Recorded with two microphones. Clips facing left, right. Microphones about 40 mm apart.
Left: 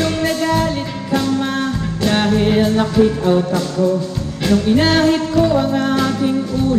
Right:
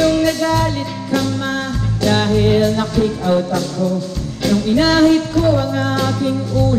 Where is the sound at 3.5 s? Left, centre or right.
Left.